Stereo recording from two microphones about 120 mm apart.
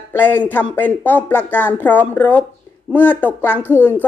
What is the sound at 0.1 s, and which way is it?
Speech, 15° left (ahead or behind).